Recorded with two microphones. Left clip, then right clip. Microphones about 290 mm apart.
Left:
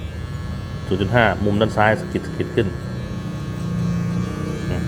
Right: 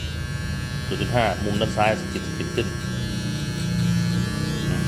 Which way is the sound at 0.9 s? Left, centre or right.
Left.